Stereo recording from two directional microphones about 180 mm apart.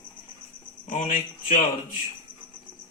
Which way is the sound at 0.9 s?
45° left (ahead or behind).